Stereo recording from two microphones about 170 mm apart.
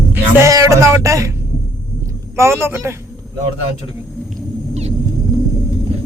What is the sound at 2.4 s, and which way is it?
Music, 15° right (ahead or behind).